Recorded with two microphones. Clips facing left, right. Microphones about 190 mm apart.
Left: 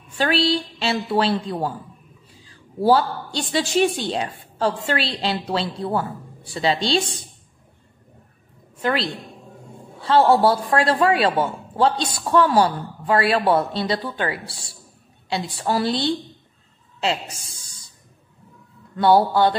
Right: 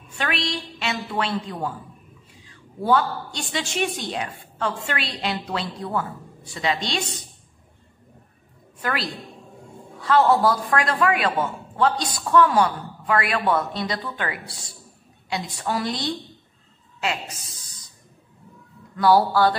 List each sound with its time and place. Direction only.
0.2 s a woman's voice: 30° left (ahead or behind)
2.8 s a woman's voice: 35° left (ahead or behind)
8.8 s a woman's voice: 25° left (ahead or behind)
18.9 s a woman's voice: 25° left (ahead or behind)